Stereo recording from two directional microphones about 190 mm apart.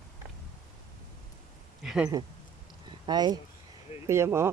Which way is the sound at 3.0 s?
20° right (ahead or behind).